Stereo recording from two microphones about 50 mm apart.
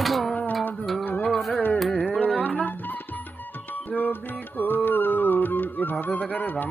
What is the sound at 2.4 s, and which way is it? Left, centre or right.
Music, left.